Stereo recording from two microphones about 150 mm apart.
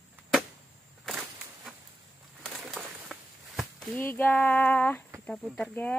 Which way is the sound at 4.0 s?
15° left (ahead or behind).